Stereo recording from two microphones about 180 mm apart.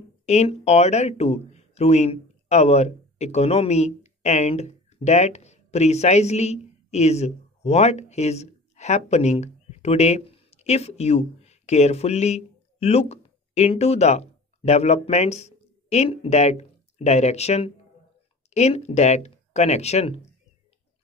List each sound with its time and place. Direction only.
0.3 s speech: 40° left (ahead or behind)